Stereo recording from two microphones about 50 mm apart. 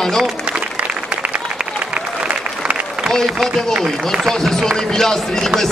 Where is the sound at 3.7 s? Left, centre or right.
Centre.